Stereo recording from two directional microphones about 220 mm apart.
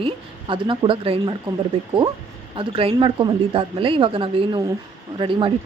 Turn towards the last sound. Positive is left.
turn(degrees=-25)  # may be behind; listen again after turning